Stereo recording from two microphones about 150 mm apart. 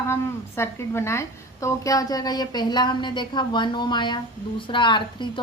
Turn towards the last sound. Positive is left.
turn(degrees=30)  # may be behind; listen again after turning